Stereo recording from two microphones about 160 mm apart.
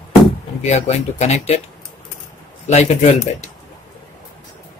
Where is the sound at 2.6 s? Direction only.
45° left (ahead or behind).